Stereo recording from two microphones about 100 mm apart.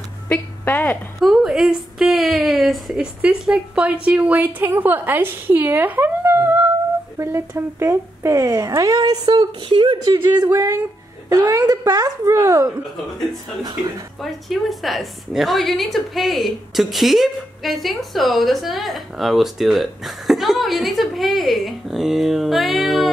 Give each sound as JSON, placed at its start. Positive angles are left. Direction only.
{"t": 0.3, "sound": "a woman's voice", "side_deg": 20}
{"t": 1.2, "sound": "a woman's voice", "side_deg": -5}
{"t": 10.5, "sound": "speech", "side_deg": -35}
{"t": 14.2, "sound": "a woman's voice", "side_deg": 0}